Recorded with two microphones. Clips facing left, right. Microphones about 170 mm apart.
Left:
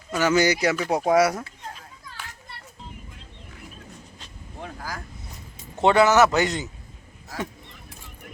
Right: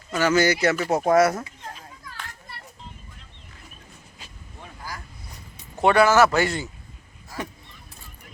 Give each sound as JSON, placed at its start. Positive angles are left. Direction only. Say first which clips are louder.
{"t": 0.1, "sound": "speech", "louder": "even", "side_deg": 15}
{"t": 0.8, "sound": "speech", "louder": "right 1 dB", "side_deg": 0}
{"t": 1.0, "sound": "speech", "louder": "right 1 dB", "side_deg": 10}
{"t": 1.3, "sound": "fowl", "louder": "right 1 dB", "side_deg": -5}
{"t": 4.6, "sound": "vehicle", "louder": "left 4 dB", "side_deg": 90}
{"t": 5.8, "sound": "a man's voice", "louder": "even", "side_deg": 20}